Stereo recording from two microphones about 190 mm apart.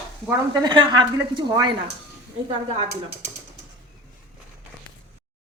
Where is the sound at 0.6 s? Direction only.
25° right (ahead or behind).